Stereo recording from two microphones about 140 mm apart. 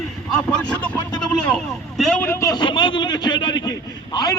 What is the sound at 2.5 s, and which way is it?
Speech, 35° left (ahead or behind).